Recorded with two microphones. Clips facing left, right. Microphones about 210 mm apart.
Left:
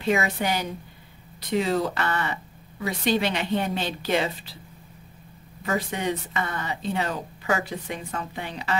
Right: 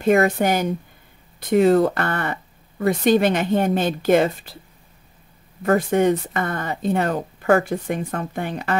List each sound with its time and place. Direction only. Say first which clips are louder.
0.0 s speech: right 8 dB; 50° right (ahead or behind)
5.6 s speech: right 10 dB; 50° right (ahead or behind)